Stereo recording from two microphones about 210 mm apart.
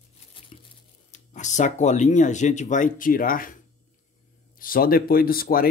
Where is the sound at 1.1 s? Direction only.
35° left (ahead or behind).